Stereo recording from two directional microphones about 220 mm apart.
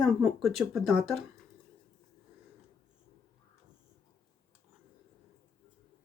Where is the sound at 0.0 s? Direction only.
Centre (ahead or behind).